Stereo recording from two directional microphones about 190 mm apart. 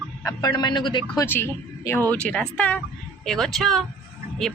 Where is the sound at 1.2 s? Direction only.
10° left (ahead or behind).